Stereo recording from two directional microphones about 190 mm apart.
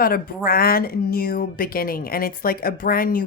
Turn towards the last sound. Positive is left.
turn(degrees=50)  # may be behind; listen again after turning